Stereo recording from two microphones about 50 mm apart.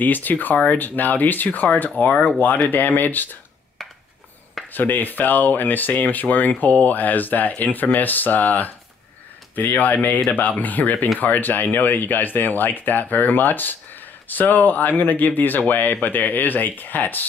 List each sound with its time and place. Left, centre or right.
0.0 s speech: left
4.7 s speech: left